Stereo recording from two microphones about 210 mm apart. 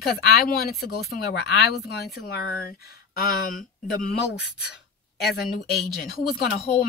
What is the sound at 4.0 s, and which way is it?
Speech, 50° left (ahead or behind).